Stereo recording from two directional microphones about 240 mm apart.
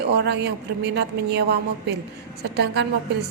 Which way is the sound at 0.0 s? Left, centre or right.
Right.